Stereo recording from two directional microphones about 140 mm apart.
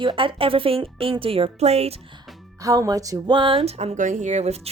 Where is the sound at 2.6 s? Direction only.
25° right (ahead or behind).